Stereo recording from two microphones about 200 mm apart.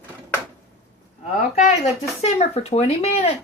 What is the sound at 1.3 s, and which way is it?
Speech, 35° left (ahead or behind).